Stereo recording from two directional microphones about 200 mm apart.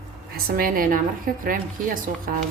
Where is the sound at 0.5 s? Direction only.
45° right (ahead or behind).